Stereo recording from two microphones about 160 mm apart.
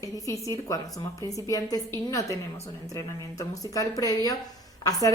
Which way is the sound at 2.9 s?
20° left (ahead or behind).